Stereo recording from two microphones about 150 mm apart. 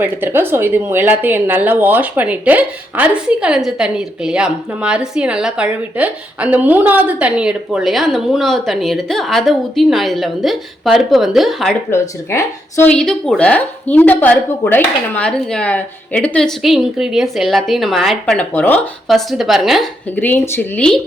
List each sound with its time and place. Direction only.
0.0 s speech: 15° right (ahead or behind)
11.9 s speech: 20° left (ahead or behind)
12.9 s speech: 5° left (ahead or behind)
18.5 s speech: 15° left (ahead or behind)
19.0 s speech: centre (ahead or behind)
20.1 s speech: 15° left (ahead or behind)